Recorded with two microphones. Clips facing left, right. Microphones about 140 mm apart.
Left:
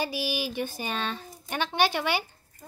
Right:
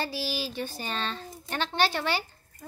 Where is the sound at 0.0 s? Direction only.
15° left (ahead or behind).